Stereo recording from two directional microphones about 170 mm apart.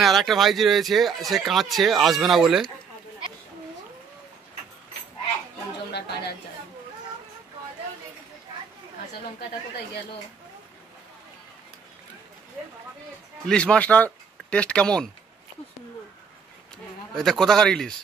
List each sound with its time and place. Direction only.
0.0 s speech: centre (ahead or behind)
5.9 s speech: 80° left
13.5 s speech: 5° left (ahead or behind)
17.1 s speech: centre (ahead or behind)